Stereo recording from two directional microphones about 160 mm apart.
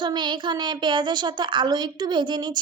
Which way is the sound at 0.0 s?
30° right (ahead or behind).